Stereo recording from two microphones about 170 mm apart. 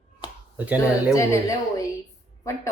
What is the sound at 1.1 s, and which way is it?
Speech, 20° left (ahead or behind).